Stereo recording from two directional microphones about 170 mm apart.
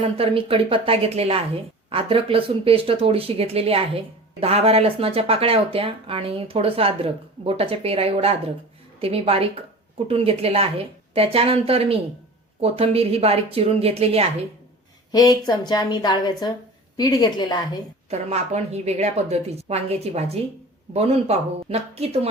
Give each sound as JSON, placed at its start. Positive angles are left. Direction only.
{"t": 0.2, "sound": "speech", "side_deg": -35}
{"t": 15.1, "sound": "a woman's voice", "side_deg": 25}
{"t": 18.1, "sound": "speech", "side_deg": -40}